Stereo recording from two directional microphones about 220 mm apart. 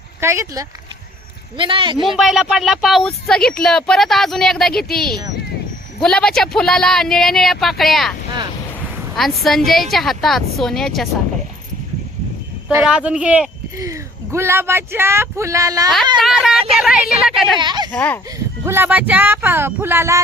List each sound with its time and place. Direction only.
0.2 s speech: 10° right (ahead or behind)
2.1 s speech: centre (ahead or behind)
9.1 s speech: centre (ahead or behind)
12.6 s speech: 5° right (ahead or behind)
16.1 s speech: centre (ahead or behind)
17.6 s speech: 20° right (ahead or behind)
17.9 s a child's voice: 10° left (ahead or behind)
18.6 s speech: 10° right (ahead or behind)